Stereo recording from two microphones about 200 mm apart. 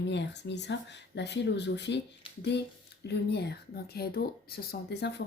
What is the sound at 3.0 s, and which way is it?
Speech, 55° left (ahead or behind).